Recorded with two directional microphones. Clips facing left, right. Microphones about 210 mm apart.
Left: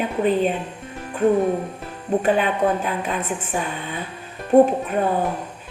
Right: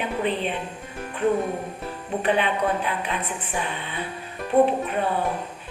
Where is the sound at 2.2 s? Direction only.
45° left (ahead or behind).